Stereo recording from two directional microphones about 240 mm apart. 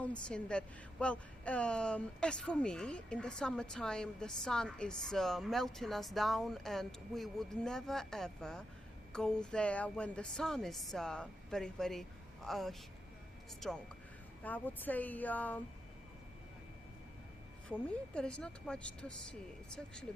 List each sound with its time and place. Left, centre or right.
0.3 s a woman's voice: centre
17.7 s a woman's voice: centre